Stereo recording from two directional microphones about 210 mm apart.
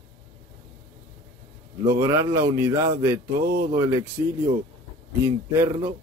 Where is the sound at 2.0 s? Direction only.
15° right (ahead or behind).